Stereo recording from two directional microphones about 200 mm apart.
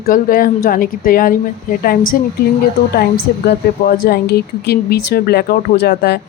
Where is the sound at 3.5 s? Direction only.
50° left (ahead or behind).